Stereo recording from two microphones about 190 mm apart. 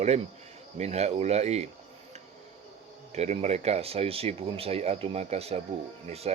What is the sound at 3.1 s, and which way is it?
Speech, 35° right (ahead or behind).